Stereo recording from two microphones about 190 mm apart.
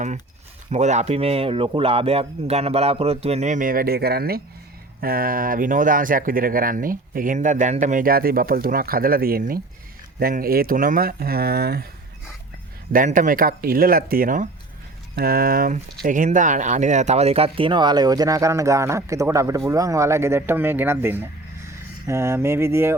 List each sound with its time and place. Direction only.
0.7 s speech: 35° right (ahead or behind); by 11.9 s 55° right (ahead or behind)
12.9 s speech: 45° right (ahead or behind); by 23.0 s 15° right (ahead or behind)